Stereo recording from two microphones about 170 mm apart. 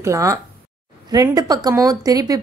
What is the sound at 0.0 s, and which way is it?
A woman's voice, 20° right (ahead or behind).